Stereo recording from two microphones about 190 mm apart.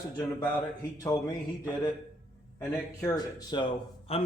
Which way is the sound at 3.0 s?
20° left (ahead or behind).